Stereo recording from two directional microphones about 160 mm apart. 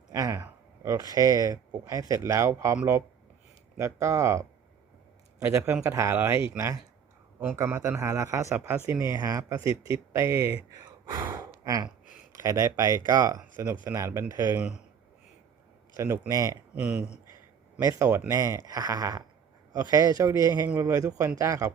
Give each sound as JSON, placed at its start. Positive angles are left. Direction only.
{"t": 0.1, "sound": "speech", "side_deg": -20}
{"t": 4.0, "sound": "speech", "side_deg": -20}
{"t": 11.0, "sound": "gasp", "side_deg": -25}
{"t": 12.3, "sound": "speech", "side_deg": -20}
{"t": 16.0, "sound": "speech", "side_deg": -15}
{"t": 17.7, "sound": "speech", "side_deg": -20}